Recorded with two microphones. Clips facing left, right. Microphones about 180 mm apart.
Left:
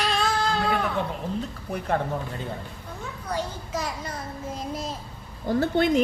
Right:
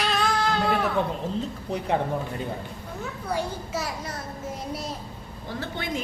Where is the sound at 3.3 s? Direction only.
10° right (ahead or behind).